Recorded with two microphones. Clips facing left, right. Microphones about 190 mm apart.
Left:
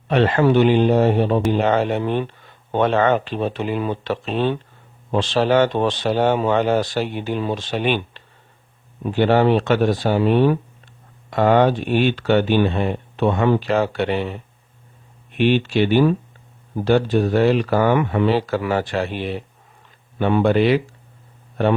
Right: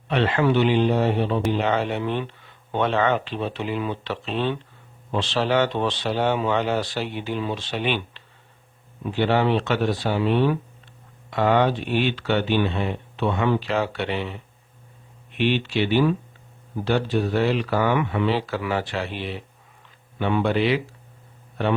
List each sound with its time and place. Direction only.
0.1 s speech: 45° left (ahead or behind)